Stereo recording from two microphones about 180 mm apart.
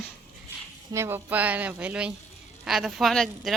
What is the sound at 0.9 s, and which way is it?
Speech, 15° right (ahead or behind).